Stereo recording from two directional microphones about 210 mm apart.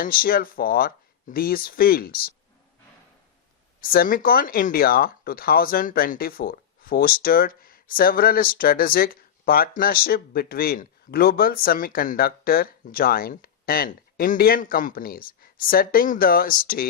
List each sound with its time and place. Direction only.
0.0 s speech: 45° left (ahead or behind)
3.8 s speech: 45° left (ahead or behind)